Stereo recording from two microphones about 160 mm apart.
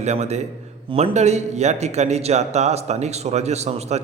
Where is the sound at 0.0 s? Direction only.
45° right (ahead or behind).